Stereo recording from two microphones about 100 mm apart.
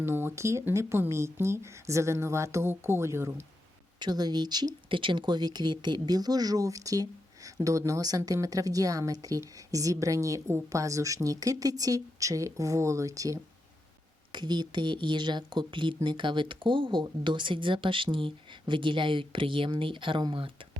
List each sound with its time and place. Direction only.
0.0 s speech: 25° right (ahead or behind)
4.0 s speech: 45° right (ahead or behind)
14.3 s speech: 50° right (ahead or behind)